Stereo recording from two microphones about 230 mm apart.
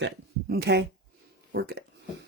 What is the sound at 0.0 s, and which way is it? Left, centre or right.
Speech, right.